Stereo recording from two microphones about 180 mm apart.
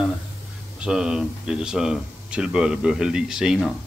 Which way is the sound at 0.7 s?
5° right (ahead or behind).